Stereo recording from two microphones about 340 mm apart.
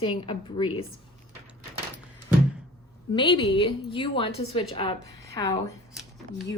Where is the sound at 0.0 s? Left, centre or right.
Centre.